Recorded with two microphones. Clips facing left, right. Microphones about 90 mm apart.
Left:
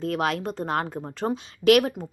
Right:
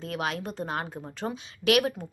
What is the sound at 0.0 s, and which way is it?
A woman's voice, 50° left (ahead or behind).